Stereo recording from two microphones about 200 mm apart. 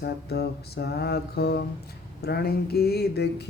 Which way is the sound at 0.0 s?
55° left (ahead or behind).